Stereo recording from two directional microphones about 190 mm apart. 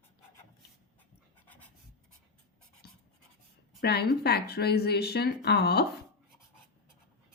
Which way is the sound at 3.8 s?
55° left (ahead or behind).